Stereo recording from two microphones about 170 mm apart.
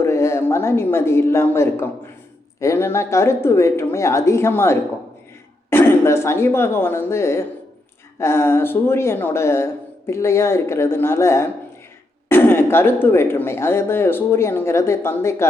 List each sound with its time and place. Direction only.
0.0 s speech: 15° left (ahead or behind)